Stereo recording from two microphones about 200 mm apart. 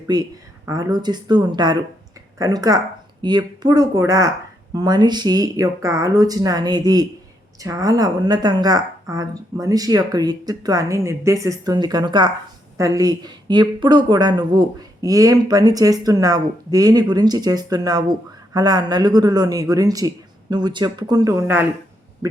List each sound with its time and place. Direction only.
0.1 s speech: 20° right (ahead or behind)